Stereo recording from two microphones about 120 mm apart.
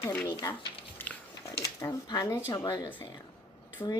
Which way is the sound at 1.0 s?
15° left (ahead or behind).